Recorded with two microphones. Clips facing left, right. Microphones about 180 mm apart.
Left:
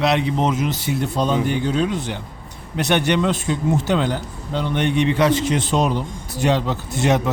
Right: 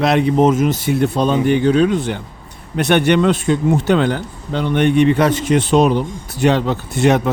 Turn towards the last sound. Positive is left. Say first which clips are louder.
# right 4 dB
turn(degrees=-60)  # may be behind; listen again after turning